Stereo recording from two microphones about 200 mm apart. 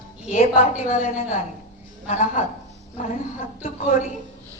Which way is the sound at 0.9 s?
35° left (ahead or behind).